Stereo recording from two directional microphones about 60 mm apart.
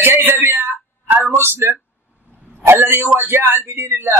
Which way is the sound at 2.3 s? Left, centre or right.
Right.